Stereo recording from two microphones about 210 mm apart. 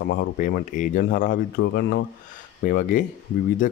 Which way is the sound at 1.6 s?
55° left (ahead or behind).